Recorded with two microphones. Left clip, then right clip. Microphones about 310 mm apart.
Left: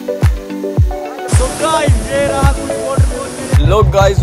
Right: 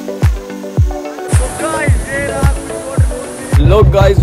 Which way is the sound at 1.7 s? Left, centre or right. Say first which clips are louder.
Left 3 dB; centre.